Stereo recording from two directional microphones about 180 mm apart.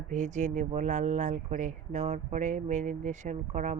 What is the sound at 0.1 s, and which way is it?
Speech, 45° right (ahead or behind).